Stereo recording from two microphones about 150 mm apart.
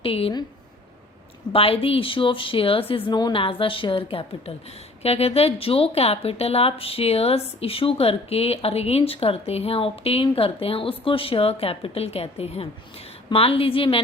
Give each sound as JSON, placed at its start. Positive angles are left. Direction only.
{"t": 0.0, "sound": "speech", "side_deg": 40}
{"t": 1.5, "sound": "speech", "side_deg": 40}